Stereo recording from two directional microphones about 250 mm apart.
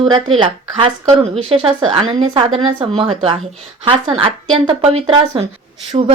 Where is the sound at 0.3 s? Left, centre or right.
Centre.